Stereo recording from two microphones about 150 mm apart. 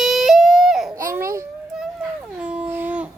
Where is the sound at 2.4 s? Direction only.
10° right (ahead or behind).